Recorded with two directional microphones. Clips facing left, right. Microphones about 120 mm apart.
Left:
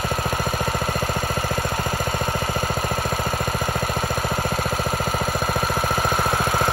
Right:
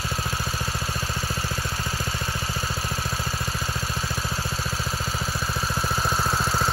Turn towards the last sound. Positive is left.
turn(degrees=55)  # may be behind; listen again after turning